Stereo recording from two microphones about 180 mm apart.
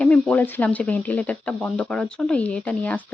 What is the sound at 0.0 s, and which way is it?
Speech, 5° left (ahead or behind).